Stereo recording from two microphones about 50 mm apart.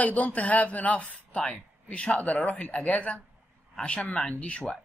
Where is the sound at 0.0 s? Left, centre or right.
Left.